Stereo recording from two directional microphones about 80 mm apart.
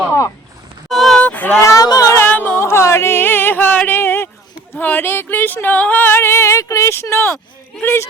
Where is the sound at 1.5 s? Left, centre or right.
Left.